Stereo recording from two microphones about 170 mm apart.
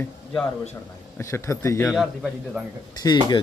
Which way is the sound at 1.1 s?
15° left (ahead or behind).